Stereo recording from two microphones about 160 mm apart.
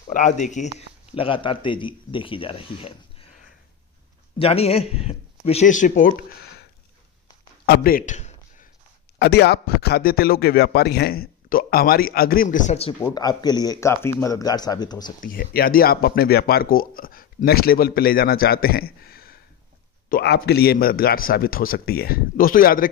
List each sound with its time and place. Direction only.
0.1 s speech: 50° left (ahead or behind)
0.7 s a man's voice: 35° left (ahead or behind)
4.4 s a man's voice: 40° left (ahead or behind); by 6.2 s 55° left (ahead or behind)
7.6 s a sound: 80° left; by 8.6 s 45° left (ahead or behind)
9.2 s speech: 90° left; by 12.9 s 45° left (ahead or behind)
13.0 s speech: 25° left (ahead or behind)
15.2 s speech: 65° left (ahead or behind)